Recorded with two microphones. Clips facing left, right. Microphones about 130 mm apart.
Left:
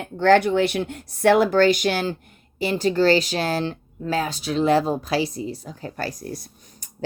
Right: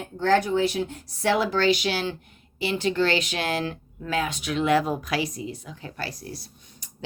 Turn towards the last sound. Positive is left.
turn(degrees=45)  # may be behind; listen again after turning